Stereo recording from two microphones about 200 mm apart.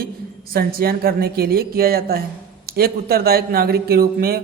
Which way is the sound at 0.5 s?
50° right (ahead or behind).